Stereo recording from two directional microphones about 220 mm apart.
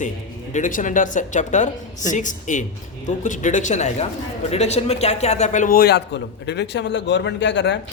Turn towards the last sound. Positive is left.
turn(degrees=55)  # may be behind; listen again after turning